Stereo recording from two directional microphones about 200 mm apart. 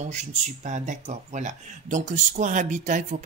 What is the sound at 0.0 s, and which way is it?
Speech, 35° right (ahead or behind).